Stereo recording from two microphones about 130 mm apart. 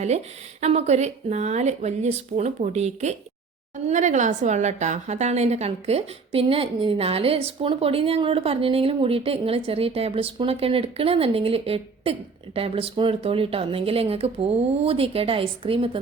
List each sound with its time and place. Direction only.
0.6 s speech: 55° right (ahead or behind)
3.8 s a woman's voice: 70° right (ahead or behind); by 16.0 s 45° right (ahead or behind)